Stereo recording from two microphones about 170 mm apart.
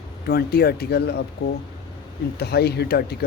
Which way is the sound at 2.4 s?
70° left (ahead or behind).